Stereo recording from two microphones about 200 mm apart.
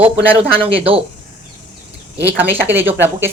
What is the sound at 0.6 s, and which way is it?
Speech, 30° right (ahead or behind).